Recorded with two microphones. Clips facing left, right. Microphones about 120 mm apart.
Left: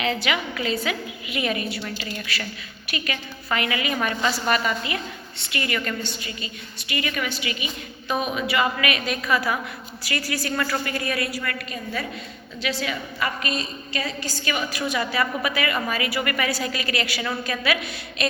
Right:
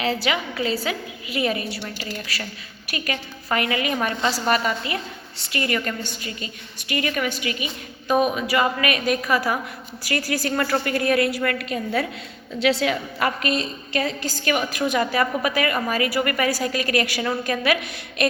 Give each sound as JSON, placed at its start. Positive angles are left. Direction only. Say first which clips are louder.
{"t": 0.0, "sound": "a woman's voice", "louder": "right 1 dB", "side_deg": -35}
{"t": 3.9, "sound": "a woman's voice", "louder": "right 1 dB", "side_deg": -25}